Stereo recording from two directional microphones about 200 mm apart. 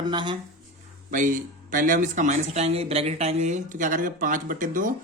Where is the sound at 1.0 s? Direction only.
40° right (ahead or behind).